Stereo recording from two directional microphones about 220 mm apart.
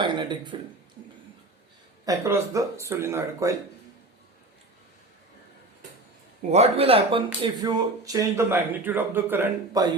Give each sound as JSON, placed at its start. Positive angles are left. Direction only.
{"t": 0.0, "sound": "a sound", "side_deg": -20}
{"t": 2.0, "sound": "speech", "side_deg": -15}
{"t": 6.5, "sound": "speech", "side_deg": -30}